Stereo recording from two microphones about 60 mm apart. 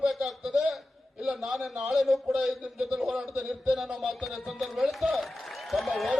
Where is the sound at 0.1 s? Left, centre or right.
Centre.